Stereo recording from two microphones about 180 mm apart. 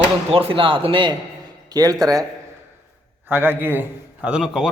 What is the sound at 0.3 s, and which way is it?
Speech, 30° right (ahead or behind).